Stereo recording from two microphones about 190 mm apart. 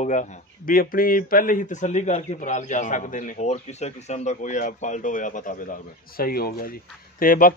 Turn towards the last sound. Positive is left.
turn(degrees=45)  # may be behind; listen again after turning